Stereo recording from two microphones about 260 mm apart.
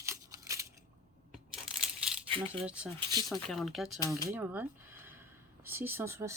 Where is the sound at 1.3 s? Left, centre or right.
Centre.